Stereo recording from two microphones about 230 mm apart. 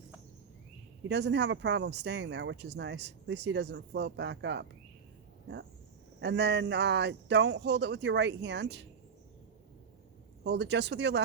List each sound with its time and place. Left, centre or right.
1.0 s speech: right
6.1 s speech: right
10.4 s speech: right